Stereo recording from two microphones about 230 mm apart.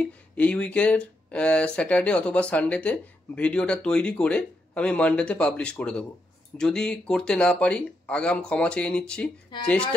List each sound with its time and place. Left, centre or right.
0.0 s speech: centre